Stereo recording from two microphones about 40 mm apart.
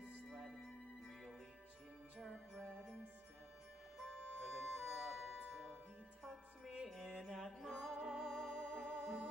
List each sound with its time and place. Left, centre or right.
4.0 s music: centre
7.1 s music: centre
7.3 s music: centre
7.8 s music: centre
8.8 s music: centre